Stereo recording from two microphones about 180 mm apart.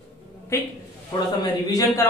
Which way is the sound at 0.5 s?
15° left (ahead or behind).